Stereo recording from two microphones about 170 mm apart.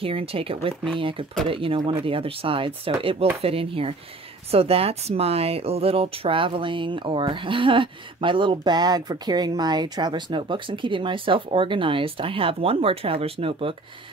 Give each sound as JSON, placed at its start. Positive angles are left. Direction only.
{"t": 0.0, "sound": "speech", "side_deg": -35}